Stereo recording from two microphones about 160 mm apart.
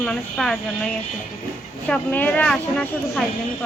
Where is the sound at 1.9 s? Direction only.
10° left (ahead or behind).